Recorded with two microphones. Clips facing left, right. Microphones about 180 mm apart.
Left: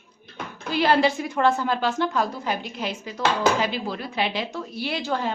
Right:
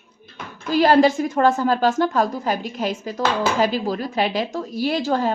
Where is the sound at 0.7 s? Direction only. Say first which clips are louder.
Right 5 dB; 45° right (ahead or behind).